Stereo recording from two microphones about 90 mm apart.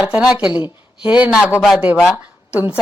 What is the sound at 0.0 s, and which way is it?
A woman's voice, 15° right (ahead or behind).